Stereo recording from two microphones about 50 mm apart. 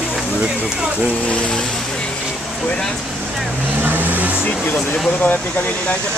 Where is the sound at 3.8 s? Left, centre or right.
Right.